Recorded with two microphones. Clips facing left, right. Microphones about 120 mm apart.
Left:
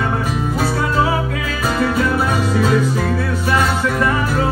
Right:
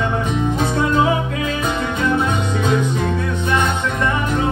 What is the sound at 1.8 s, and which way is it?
Music, 20° right (ahead or behind).